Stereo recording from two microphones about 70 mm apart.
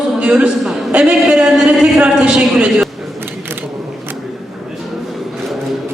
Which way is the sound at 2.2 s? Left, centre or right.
Centre.